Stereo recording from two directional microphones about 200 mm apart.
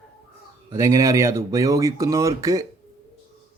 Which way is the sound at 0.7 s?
15° right (ahead or behind).